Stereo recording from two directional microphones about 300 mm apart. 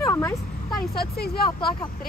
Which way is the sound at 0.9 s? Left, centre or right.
Left.